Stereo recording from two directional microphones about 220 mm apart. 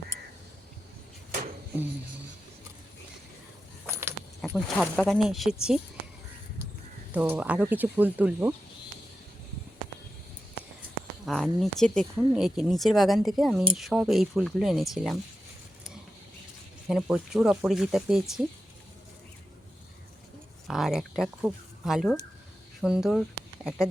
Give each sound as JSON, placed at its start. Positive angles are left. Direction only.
{"t": 3.8, "sound": "keys jangling", "side_deg": -10}
{"t": 4.4, "sound": "speech", "side_deg": 0}
{"t": 7.1, "sound": "speech", "side_deg": -5}
{"t": 11.3, "sound": "speech", "side_deg": 0}
{"t": 16.9, "sound": "speech", "side_deg": 0}
{"t": 20.7, "sound": "speech", "side_deg": 0}